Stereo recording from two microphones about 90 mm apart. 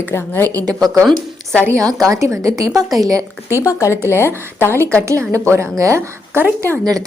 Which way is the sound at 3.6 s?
35° left (ahead or behind).